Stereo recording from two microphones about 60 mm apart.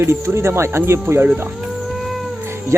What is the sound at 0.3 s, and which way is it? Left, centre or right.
Speech, right.